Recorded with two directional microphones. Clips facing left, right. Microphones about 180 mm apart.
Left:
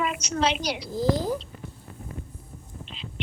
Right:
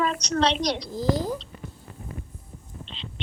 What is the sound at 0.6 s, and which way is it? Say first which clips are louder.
Speech: right 1 dB; 5° left (ahead or behind).